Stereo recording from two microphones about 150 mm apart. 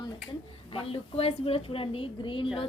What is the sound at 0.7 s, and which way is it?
A woman's voice, 40° left (ahead or behind).